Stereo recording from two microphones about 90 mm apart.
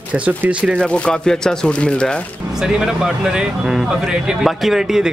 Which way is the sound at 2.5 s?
5° right (ahead or behind).